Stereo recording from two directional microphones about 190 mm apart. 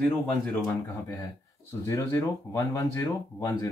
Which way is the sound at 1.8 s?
15° left (ahead or behind).